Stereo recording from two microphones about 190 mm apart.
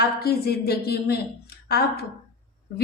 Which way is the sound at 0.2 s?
55° left (ahead or behind).